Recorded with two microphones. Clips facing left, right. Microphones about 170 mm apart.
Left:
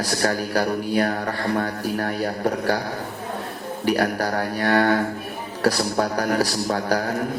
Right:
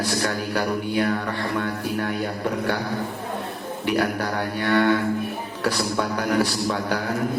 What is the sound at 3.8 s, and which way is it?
Speech, 40° left (ahead or behind).